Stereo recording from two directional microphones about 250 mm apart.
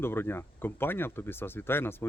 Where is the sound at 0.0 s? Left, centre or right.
Centre.